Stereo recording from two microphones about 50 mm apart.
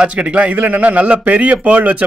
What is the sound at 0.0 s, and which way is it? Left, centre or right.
A man's voice, right.